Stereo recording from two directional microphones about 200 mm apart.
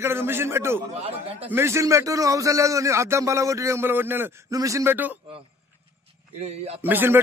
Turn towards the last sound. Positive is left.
turn(degrees=-10)  # may be behind; listen again after turning